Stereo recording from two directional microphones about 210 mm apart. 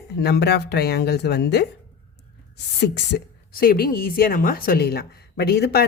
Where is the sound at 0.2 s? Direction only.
50° left (ahead or behind).